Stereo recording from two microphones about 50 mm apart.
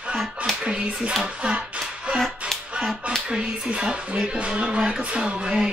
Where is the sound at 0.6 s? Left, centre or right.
Centre.